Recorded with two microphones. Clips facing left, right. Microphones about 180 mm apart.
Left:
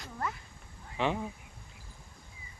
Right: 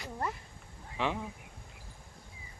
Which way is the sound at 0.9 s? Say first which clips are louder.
Left 2 dB; centre (ahead or behind).